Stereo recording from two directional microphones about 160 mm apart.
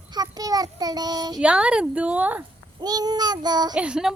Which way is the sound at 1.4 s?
5° right (ahead or behind).